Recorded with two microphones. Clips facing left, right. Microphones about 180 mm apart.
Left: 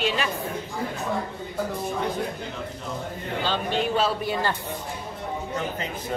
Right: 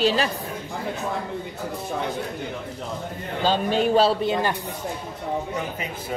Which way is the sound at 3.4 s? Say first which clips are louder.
Right 5 dB; 40° right (ahead or behind).